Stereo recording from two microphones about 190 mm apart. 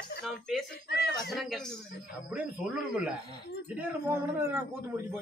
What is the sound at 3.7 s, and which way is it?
Speech, 10° right (ahead or behind).